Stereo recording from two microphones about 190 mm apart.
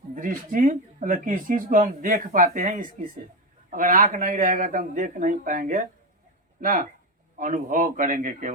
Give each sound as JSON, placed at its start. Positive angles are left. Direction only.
{"t": 0.1, "sound": "speech", "side_deg": -45}